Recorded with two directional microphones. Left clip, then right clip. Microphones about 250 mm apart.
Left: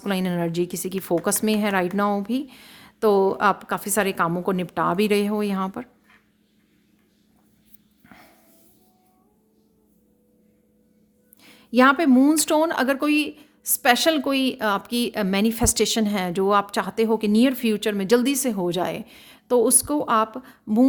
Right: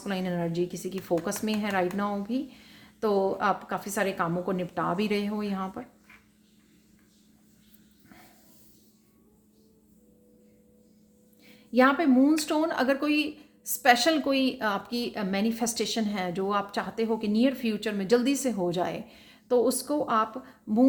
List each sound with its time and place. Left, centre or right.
0.0 s speech: left
11.4 s speech: left